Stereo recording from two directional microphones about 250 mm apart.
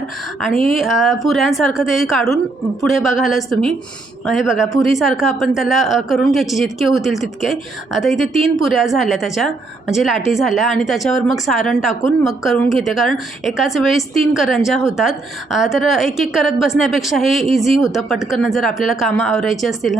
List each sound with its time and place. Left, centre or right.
0.4 s a woman's voice: centre